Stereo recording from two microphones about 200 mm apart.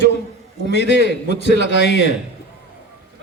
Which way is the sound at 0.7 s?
60° left (ahead or behind).